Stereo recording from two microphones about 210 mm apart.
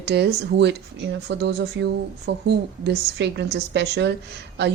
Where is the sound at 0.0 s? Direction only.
50° right (ahead or behind).